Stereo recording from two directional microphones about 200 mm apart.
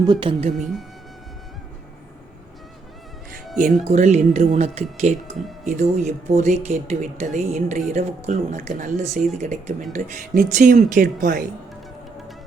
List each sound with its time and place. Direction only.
0.0 s speech: 20° right (ahead or behind)
0.5 s speech: centre (ahead or behind)
3.8 s speech: 35° right (ahead or behind)